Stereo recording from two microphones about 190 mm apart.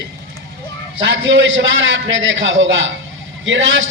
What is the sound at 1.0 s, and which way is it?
A man's voice, 75° right (ahead or behind).